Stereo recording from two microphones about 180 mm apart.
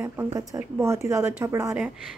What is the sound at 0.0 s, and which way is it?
A woman's voice, 15° right (ahead or behind).